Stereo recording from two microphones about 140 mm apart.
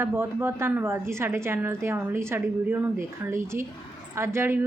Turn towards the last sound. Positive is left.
turn(degrees=-15)  # may be behind; listen again after turning